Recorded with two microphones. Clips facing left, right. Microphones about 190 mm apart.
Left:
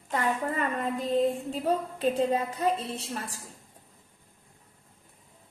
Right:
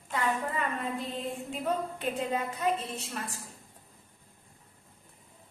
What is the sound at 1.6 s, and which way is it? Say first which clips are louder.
A woman's voice: left 5 dB; 35° left (ahead or behind).